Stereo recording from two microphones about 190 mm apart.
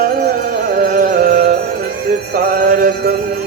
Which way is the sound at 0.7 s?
45° right (ahead or behind).